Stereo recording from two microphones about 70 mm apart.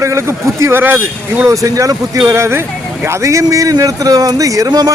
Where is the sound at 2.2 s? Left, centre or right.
Right.